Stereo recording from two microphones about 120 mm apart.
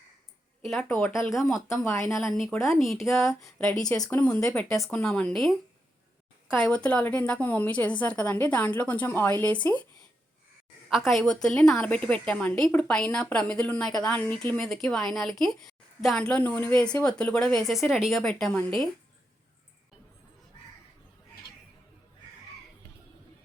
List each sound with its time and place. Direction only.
0.6 s speech: centre (ahead or behind)
1.8 s a woman's voice: 20° left (ahead or behind)
2.1 s speech: centre (ahead or behind)
3.9 s speech: 30° left (ahead or behind)
4.4 s a woman's voice: 5° left (ahead or behind)
10.8 s a woman's voice: 5° left (ahead or behind)